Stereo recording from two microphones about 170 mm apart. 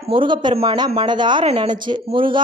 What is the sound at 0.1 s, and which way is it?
Speech, 30° right (ahead or behind).